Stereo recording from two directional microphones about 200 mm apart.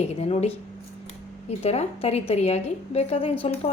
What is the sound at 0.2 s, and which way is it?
A woman's voice, 30° left (ahead or behind).